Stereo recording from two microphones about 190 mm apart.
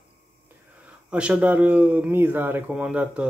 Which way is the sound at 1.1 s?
5° right (ahead or behind).